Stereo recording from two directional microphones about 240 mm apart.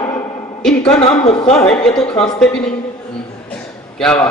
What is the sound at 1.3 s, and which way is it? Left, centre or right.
Speech, left.